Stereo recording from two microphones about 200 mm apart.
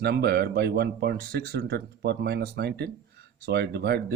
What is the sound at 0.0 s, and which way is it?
Speech, 55° right (ahead or behind).